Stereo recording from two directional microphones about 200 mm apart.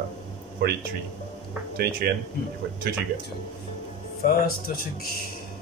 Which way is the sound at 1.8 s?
50° right (ahead or behind).